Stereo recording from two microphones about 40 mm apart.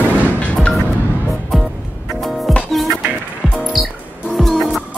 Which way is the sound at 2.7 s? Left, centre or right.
Centre.